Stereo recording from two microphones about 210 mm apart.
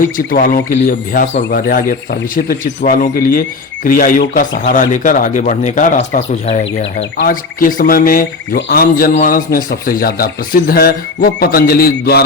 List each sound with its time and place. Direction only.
0.3 s a man's voice: 40° left (ahead or behind)